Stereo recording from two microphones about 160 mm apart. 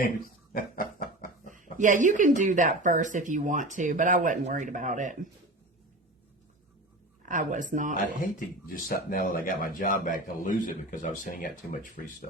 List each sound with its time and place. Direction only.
0.5 s a sound: 60° left (ahead or behind)
1.8 s speech: 55° right (ahead or behind)
7.2 s speech: 55° right (ahead or behind)
7.9 s speech: 60° left (ahead or behind)